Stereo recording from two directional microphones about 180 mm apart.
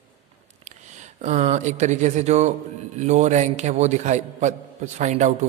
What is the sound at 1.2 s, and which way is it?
Speech, 40° right (ahead or behind).